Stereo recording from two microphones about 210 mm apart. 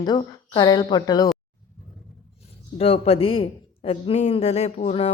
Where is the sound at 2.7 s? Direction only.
30° left (ahead or behind).